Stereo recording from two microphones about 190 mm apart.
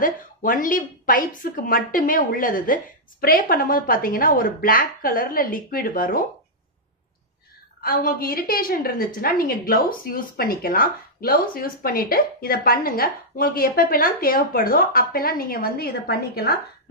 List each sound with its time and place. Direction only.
0.0 s a woman's voice: 45° left (ahead or behind)
7.8 s a woman's voice: 50° left (ahead or behind)